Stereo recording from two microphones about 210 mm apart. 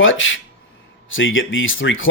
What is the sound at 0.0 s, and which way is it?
Speech, 65° left (ahead or behind).